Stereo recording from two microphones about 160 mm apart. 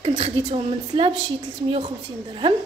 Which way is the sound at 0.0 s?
40° right (ahead or behind).